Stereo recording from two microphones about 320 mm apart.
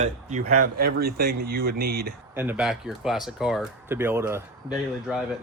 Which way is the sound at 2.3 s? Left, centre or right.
Centre.